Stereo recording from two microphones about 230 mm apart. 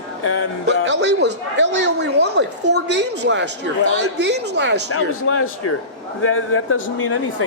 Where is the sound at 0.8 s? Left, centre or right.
Right.